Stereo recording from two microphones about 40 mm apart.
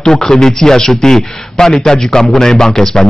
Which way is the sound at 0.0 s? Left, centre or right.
Centre.